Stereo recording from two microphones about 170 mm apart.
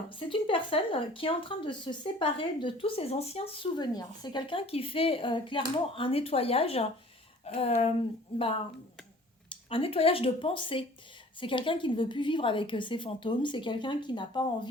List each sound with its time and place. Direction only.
0.2 s speech: 30° left (ahead or behind)
9.5 s a woman's voice: 30° left (ahead or behind)